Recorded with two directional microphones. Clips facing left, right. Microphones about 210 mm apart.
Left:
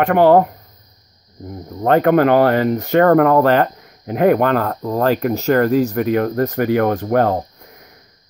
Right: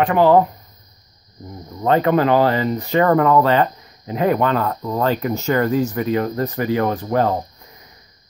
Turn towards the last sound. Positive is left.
turn(degrees=55)  # may be behind; listen again after turning